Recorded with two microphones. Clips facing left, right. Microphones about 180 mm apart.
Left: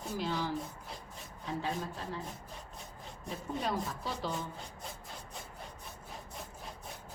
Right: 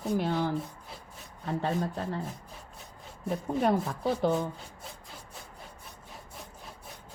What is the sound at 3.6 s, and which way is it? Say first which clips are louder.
Speech: right 10 dB; 55° right (ahead or behind).